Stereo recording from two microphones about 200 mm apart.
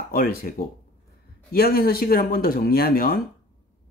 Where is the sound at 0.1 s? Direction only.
45° left (ahead or behind).